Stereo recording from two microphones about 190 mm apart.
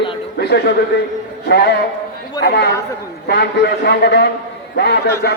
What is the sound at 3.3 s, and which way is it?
A man's voice, 65° left (ahead or behind).